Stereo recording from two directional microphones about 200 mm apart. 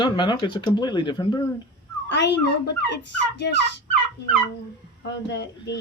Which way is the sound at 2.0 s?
60° left (ahead or behind).